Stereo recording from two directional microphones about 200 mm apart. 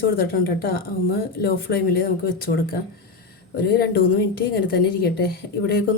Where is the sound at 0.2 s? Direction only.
50° left (ahead or behind).